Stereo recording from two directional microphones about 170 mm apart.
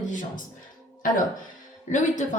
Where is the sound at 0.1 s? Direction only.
50° left (ahead or behind).